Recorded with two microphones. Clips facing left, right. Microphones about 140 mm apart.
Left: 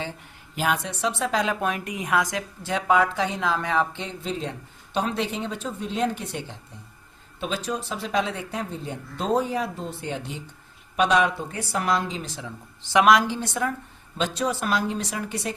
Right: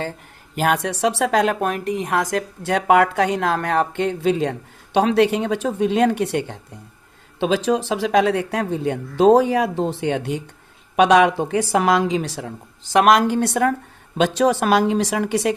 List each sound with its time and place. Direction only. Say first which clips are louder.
0.0 s speech: right 5 dB; 50° right (ahead or behind); by 6.6 s 65° right (ahead or behind)
7.3 s speech: right 10 dB; 90° right; by 10.4 s 65° right (ahead or behind)
10.9 s speech: right 7 dB; 85° right; by 13.7 s 65° right (ahead or behind)
14.3 s a woman's voice: right 9 dB; 90° right